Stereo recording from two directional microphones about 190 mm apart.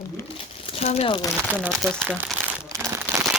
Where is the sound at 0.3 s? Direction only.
30° left (ahead or behind).